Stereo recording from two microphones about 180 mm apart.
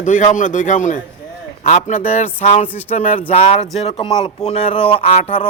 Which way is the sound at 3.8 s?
30° left (ahead or behind).